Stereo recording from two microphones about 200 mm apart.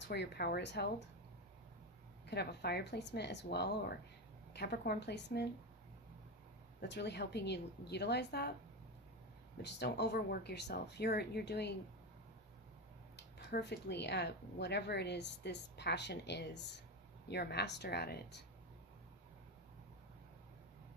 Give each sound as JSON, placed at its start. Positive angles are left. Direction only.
{"t": 0.0, "sound": "speech", "side_deg": 55}
{"t": 2.2, "sound": "speech", "side_deg": 55}
{"t": 6.8, "sound": "speech", "side_deg": 60}
{"t": 9.6, "sound": "speech", "side_deg": 55}
{"t": 13.5, "sound": "speech", "side_deg": 55}